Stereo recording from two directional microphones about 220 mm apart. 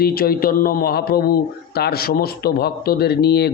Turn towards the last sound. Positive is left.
turn(degrees=50)  # may be behind; listen again after turning